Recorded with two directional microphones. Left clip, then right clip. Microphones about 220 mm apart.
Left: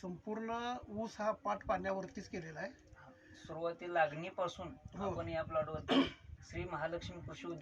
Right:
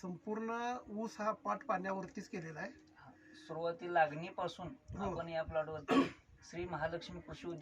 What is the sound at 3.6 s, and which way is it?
Speech, 10° left (ahead or behind).